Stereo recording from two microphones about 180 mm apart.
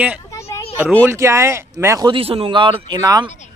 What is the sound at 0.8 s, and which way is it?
A man's voice, 10° right (ahead or behind).